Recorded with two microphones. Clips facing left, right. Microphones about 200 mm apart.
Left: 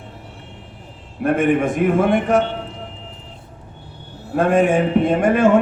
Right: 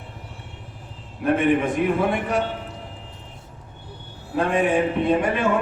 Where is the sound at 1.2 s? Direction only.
50° left (ahead or behind).